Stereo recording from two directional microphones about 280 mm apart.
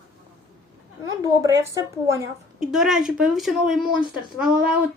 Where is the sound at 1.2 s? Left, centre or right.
Centre.